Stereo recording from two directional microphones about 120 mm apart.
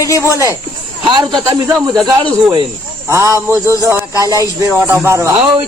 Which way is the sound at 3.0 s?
25° right (ahead or behind).